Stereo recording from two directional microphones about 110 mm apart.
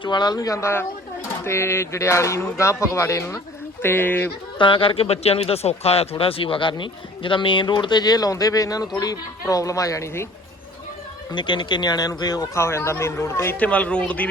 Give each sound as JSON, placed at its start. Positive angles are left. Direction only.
{"t": 0.0, "sound": "speech", "side_deg": 40}
{"t": 4.5, "sound": "speech", "side_deg": 50}
{"t": 11.3, "sound": "speech", "side_deg": 45}
{"t": 12.5, "sound": "speech", "side_deg": 25}